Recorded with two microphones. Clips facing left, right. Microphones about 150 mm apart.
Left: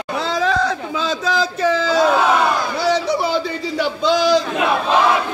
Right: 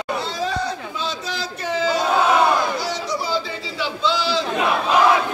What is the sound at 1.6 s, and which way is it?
Battle cry, 90° left.